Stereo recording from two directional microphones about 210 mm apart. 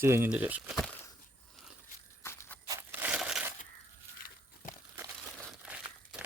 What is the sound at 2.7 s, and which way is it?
Crushing, 10° right (ahead or behind).